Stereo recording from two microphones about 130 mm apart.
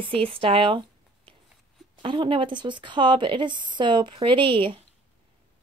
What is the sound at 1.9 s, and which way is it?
Speech, 40° right (ahead or behind).